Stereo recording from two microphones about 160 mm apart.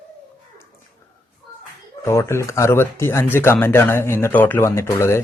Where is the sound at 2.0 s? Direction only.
15° left (ahead or behind).